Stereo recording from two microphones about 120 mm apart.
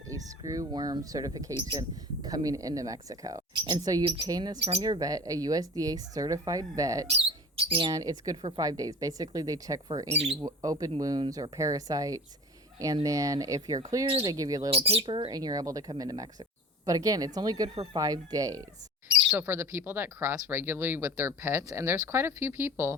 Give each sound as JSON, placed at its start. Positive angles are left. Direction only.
{"t": 0.1, "sound": "speech", "side_deg": -30}
{"t": 7.2, "sound": "speech", "side_deg": -55}
{"t": 7.9, "sound": "speech", "side_deg": -30}
{"t": 10.1, "sound": "speech", "side_deg": -60}
{"t": 10.4, "sound": "speech", "side_deg": -30}
{"t": 14.7, "sound": "speech", "side_deg": -55}
{"t": 15.0, "sound": "speech", "side_deg": -40}